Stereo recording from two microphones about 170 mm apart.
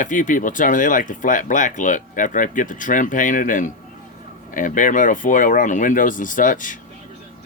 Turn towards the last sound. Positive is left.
turn(degrees=50)  # may be behind; listen again after turning